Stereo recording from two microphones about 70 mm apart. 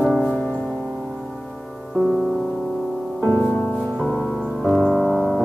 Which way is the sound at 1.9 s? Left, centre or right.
Centre.